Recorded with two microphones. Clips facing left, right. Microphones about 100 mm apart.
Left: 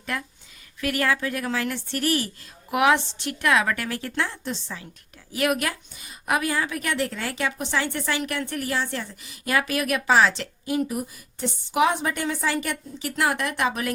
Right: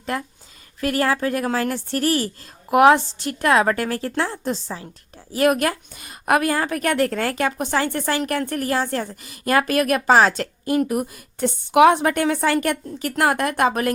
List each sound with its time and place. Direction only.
0.8 s a woman's voice: 35° right (ahead or behind)